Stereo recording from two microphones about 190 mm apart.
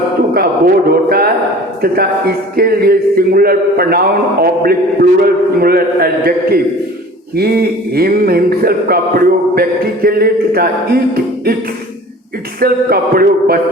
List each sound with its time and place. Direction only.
0.3 s speech: 50° right (ahead or behind)
1.8 s music: 55° right (ahead or behind)
12.5 s music: 50° right (ahead or behind)